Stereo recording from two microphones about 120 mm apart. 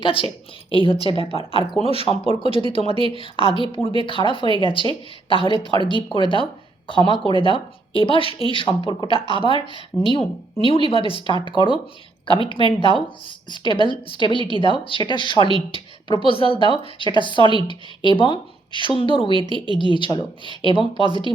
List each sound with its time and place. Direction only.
0.0 s speech: 45° left (ahead or behind)